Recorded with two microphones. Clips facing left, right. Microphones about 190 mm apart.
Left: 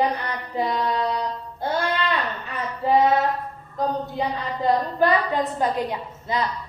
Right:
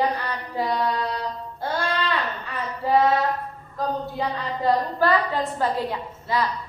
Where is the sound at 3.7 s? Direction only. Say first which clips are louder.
Left 2 dB; 20° left (ahead or behind).